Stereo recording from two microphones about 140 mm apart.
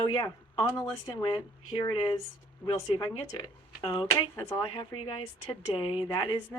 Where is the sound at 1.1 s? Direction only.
35° left (ahead or behind).